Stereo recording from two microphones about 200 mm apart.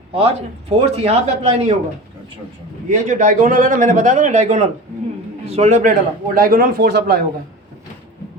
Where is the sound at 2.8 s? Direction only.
40° right (ahead or behind).